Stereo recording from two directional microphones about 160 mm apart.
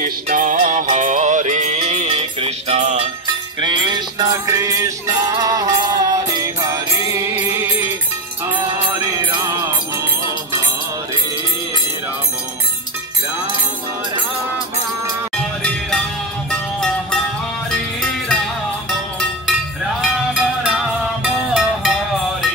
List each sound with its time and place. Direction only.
0.0 s music: 60° right (ahead or behind)
3.6 s music: 30° right (ahead or behind)
19.1 s music: centre (ahead or behind)